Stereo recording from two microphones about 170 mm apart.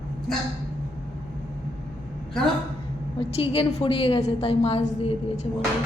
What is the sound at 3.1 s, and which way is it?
A woman's voice, 35° left (ahead or behind).